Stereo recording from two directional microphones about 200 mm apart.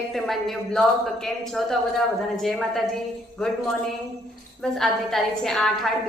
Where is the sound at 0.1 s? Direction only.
Centre (ahead or behind).